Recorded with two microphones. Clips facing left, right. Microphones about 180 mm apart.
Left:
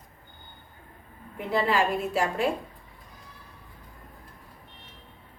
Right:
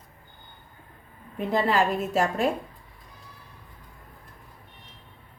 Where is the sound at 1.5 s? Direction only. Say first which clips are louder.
Right 1 dB; 45° right (ahead or behind).